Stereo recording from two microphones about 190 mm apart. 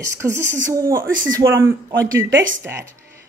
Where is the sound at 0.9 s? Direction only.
45° right (ahead or behind).